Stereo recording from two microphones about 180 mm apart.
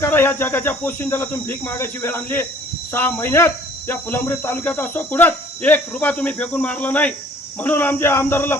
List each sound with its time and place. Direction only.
0.0 s speech: 10° left (ahead or behind)